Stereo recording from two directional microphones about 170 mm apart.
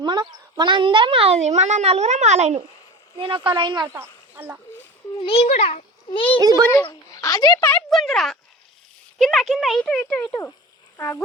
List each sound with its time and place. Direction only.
0.0 s speech: 25° right (ahead or behind)
3.2 s speech: 25° right (ahead or behind)
4.4 s speech: 10° right (ahead or behind)
5.2 s a child's voice: 35° left (ahead or behind)
6.8 s speech: 20° left (ahead or behind)
7.7 s speech: 5° left (ahead or behind)